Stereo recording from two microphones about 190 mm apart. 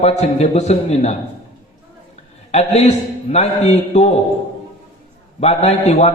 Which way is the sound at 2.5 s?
35° left (ahead or behind).